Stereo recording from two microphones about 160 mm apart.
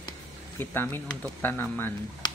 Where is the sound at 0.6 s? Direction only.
15° left (ahead or behind).